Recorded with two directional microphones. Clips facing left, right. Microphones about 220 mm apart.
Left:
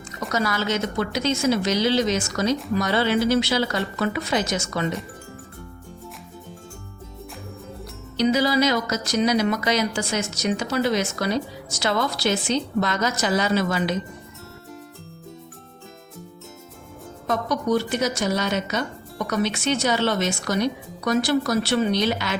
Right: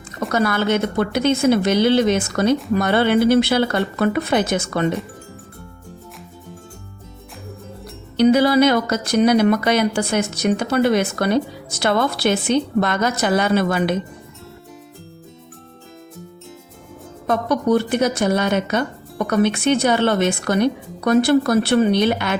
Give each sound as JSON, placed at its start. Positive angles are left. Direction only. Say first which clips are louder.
{"t": 0.2, "sound": "speech", "louder": "right 5 dB", "side_deg": -55}
{"t": 8.1, "sound": "speech", "louder": "right 6 dB", "side_deg": -55}
{"t": 17.2, "sound": "speech", "louder": "right 5 dB", "side_deg": -55}